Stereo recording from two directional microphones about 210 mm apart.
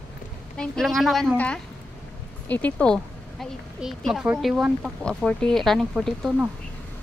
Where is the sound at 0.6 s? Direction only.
Centre (ahead or behind).